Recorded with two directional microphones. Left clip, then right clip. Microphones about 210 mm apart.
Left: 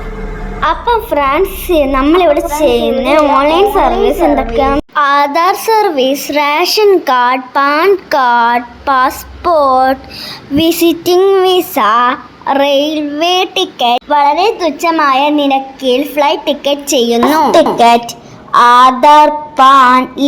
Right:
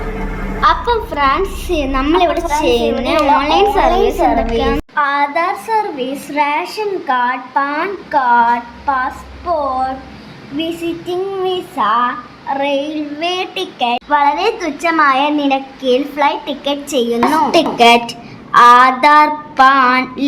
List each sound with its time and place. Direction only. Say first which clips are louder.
0.6 s a woman's voice: left 1 dB; 25° left (ahead or behind)
4.9 s child singing: left 5 dB; 35° left (ahead or behind)
17.5 s a sound: left 2 dB; 10° left (ahead or behind)